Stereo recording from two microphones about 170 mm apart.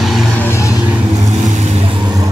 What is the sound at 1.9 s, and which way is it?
Vehicle, 25° right (ahead or behind).